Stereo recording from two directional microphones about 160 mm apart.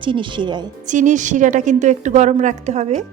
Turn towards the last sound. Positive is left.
turn(degrees=-45)  # may be behind; listen again after turning